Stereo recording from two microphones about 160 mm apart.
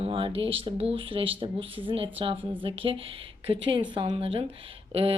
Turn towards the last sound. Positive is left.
turn(degrees=-40)  # may be behind; listen again after turning